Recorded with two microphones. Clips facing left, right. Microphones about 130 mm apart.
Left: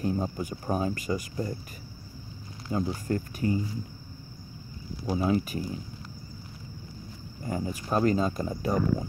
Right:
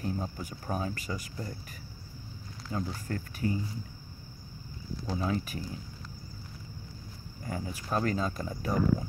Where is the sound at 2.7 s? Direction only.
15° left (ahead or behind).